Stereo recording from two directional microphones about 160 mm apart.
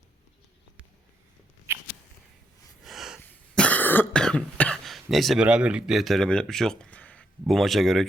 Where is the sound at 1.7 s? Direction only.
15° right (ahead or behind).